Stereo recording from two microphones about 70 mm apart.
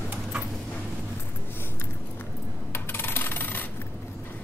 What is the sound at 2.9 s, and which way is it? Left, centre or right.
Rub, left.